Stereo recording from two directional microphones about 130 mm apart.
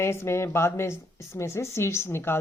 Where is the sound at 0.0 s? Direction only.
20° left (ahead or behind).